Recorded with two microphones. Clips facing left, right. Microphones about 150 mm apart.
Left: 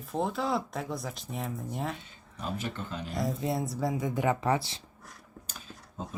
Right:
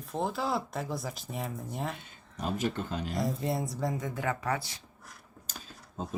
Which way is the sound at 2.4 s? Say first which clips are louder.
Right 4 dB; 40° right (ahead or behind).